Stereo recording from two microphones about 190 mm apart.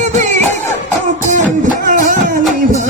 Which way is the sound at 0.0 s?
40° right (ahead or behind).